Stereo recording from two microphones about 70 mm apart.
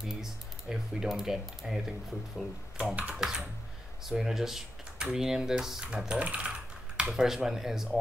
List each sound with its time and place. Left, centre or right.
0.0 s speech: centre
3.0 s speech: centre
4.0 s speech: centre
7.1 s speech: centre